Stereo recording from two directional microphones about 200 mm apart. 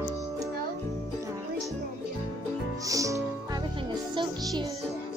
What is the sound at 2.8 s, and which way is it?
Music, 15° right (ahead or behind).